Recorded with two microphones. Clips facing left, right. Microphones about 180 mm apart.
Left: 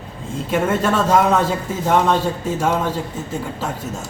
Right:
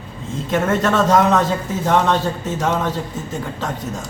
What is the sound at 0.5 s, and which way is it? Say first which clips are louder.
A man's voice: right 1 dB; 10° left (ahead or behind).